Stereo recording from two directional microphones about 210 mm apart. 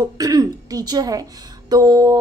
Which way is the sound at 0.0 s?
15° right (ahead or behind).